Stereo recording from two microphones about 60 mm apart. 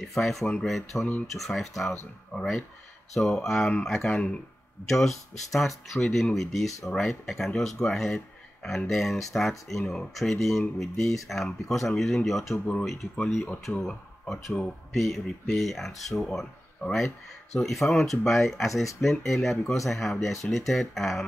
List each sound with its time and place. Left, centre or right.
0.0 s speech: centre
4.1 s speech: centre
4.8 s speech: centre